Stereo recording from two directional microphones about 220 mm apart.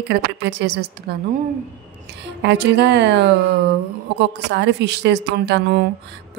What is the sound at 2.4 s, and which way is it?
Speech, 50° right (ahead or behind).